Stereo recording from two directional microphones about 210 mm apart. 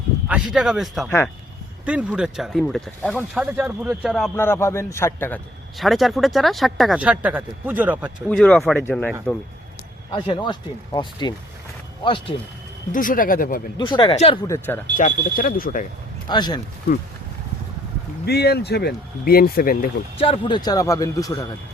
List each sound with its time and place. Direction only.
0.3 s speech: 5° right (ahead or behind)
4.4 s a man's voice: 10° left (ahead or behind)
5.7 s speech: centre (ahead or behind)
8.3 s a man's voice: 5° left (ahead or behind)
10.2 s speech: 20° left (ahead or behind)
12.9 s speech: 40° left (ahead or behind)
13.7 s speech: 20° left (ahead or behind)
14.4 s a man's voice: 10° left (ahead or behind)
14.9 s speech: 40° left (ahead or behind)
16.3 s speech: 20° left (ahead or behind)
18.3 s speech: 50° left (ahead or behind)
20.1 s a man's voice: 25° left (ahead or behind)